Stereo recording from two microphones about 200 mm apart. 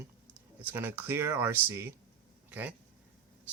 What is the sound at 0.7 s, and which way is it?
Speech, 10° right (ahead or behind).